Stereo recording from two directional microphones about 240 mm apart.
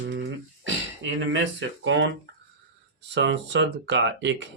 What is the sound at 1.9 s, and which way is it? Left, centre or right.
Speech, right.